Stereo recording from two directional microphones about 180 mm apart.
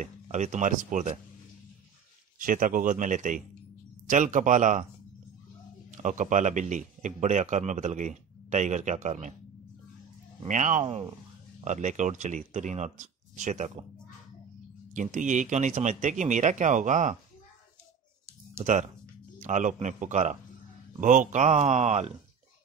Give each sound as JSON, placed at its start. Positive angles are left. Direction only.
{"t": 0.0, "sound": "speech", "side_deg": -40}
{"t": 2.3, "sound": "a man's voice", "side_deg": -50}
{"t": 5.9, "sound": "a man's voice", "side_deg": -45}
{"t": 10.4, "sound": "a man's voice", "side_deg": -45}
{"t": 15.0, "sound": "a man's voice", "side_deg": -45}
{"t": 18.6, "sound": "a man's voice", "side_deg": -40}